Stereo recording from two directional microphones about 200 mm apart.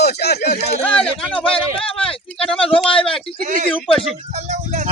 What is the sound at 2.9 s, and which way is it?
Speech, 25° left (ahead or behind).